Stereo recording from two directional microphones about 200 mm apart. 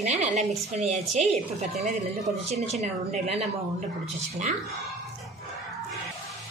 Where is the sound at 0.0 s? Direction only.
35° right (ahead or behind).